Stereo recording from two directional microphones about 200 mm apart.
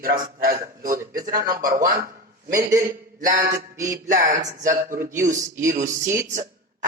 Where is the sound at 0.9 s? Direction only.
15° right (ahead or behind).